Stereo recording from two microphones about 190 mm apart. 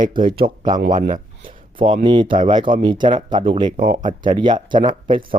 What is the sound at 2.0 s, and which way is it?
Speech, 25° right (ahead or behind).